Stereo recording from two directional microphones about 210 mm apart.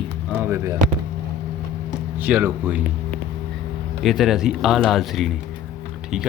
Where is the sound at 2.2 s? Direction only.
10° right (ahead or behind).